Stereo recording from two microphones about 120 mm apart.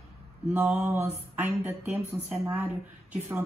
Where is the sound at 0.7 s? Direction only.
20° right (ahead or behind).